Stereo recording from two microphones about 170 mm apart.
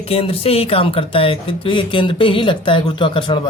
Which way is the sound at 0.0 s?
35° left (ahead or behind).